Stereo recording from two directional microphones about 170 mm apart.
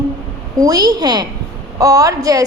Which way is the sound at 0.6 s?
20° right (ahead or behind).